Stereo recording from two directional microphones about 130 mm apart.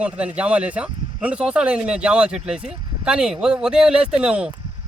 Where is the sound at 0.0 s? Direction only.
10° right (ahead or behind).